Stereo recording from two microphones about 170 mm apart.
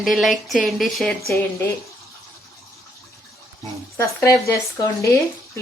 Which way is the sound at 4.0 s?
15° left (ahead or behind).